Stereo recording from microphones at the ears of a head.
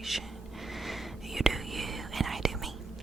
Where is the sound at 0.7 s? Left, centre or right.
Centre.